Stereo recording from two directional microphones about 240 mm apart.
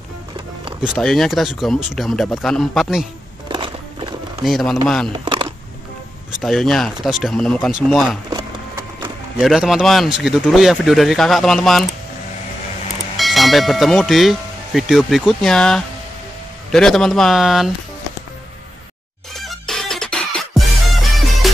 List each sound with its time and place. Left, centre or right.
0.8 s speech: centre
3.4 s a sound: centre
4.4 s speech: centre
5.1 s a sound: right
6.3 s speech: centre
8.3 s a sound: centre
9.4 s speech: centre
13.2 s speech: centre
19.4 s music: centre